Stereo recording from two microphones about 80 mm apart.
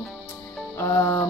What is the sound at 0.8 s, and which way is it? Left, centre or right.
Speech, left.